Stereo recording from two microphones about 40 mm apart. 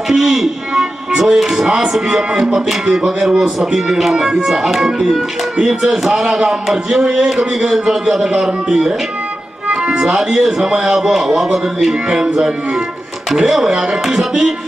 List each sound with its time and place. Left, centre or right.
0.1 s speech: centre
9.7 s music: centre
10.1 s speech: centre
13.3 s speech: centre